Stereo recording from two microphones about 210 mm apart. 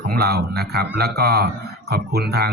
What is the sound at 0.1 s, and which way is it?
Speech, 50° right (ahead or behind).